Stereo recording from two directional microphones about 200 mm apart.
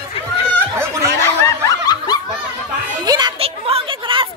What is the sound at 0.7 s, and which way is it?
Snicker, 15° right (ahead or behind).